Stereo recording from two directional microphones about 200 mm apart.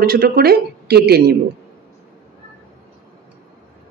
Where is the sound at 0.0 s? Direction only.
50° right (ahead or behind).